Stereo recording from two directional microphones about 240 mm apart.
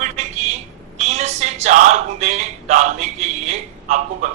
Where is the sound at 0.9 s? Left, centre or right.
Right.